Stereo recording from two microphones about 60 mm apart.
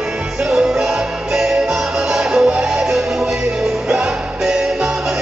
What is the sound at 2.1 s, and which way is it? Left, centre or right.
Music, centre.